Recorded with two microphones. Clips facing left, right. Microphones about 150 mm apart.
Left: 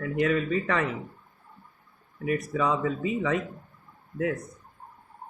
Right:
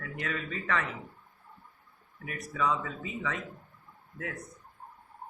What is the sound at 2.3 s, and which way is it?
Speech, 20° left (ahead or behind).